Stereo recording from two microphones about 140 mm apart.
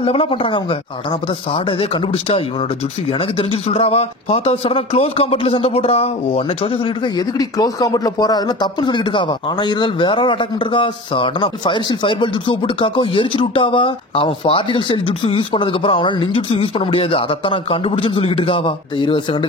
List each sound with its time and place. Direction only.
0.0 s speech: 40° left (ahead or behind)
7.2 s speech: 25° left (ahead or behind)